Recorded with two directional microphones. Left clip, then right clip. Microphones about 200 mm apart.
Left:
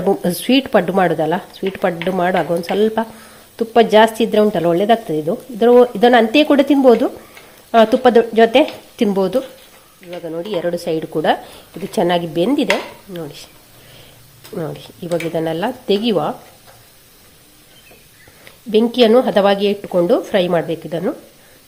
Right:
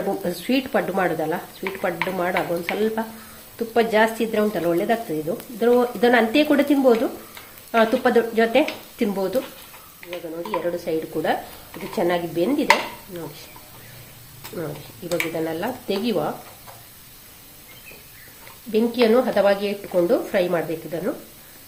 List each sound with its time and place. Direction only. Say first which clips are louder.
0.2 s a woman's voice: left 7 dB; 50° left (ahead or behind)
10.5 s a woman's voice: left 4 dB; 50° left (ahead or behind)
15.1 s a woman's voice: left 5 dB; 45° left (ahead or behind)
18.7 s a woman's voice: left 6 dB; 45° left (ahead or behind)